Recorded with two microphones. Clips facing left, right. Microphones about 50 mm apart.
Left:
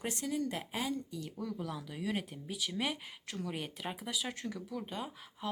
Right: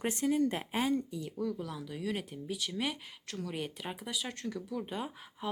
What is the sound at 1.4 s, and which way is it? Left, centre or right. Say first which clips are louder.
Speech: right 3 dB; centre.